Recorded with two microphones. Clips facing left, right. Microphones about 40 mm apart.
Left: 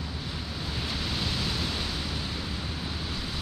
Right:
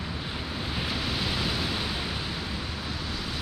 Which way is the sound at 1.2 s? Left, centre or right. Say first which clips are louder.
Right 2 dB; centre.